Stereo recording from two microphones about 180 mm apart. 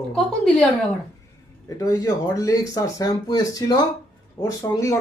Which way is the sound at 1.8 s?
20° left (ahead or behind).